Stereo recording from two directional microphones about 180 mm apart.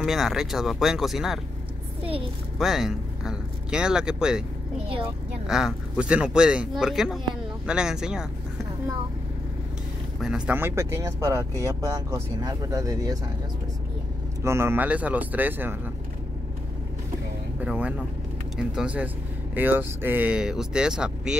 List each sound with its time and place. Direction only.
0.0 s speech: centre (ahead or behind)
2.6 s speech: centre (ahead or behind)
5.5 s speech: centre (ahead or behind)
10.2 s speech: 5° right (ahead or behind)
14.4 s speech: 15° right (ahead or behind)
17.6 s speech: 10° right (ahead or behind)